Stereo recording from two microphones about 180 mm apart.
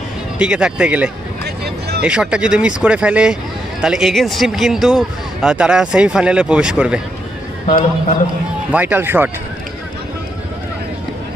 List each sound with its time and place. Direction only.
0.3 s speech: 5° right (ahead or behind)
1.6 s a sound: 65° right (ahead or behind)
2.0 s speech: 5° right (ahead or behind)
8.7 s speech: 10° right (ahead or behind)